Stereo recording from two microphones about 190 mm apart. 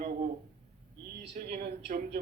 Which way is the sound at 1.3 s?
40° right (ahead or behind).